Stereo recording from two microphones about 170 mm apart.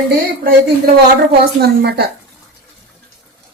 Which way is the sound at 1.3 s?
70° right (ahead or behind).